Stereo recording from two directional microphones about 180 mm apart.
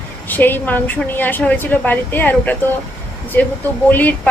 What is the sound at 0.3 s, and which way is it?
A woman's voice, 10° left (ahead or behind).